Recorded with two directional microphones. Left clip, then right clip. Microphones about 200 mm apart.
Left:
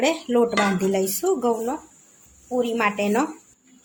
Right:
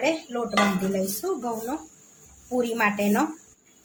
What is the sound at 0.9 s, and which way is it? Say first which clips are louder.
Speech: left 5 dB; 40° left (ahead or behind).